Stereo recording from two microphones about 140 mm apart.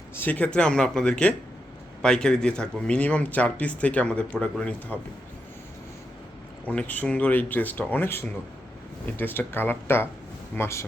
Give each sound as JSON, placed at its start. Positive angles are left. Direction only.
{"t": 0.2, "sound": "speech", "side_deg": 10}
{"t": 6.7, "sound": "speech", "side_deg": 10}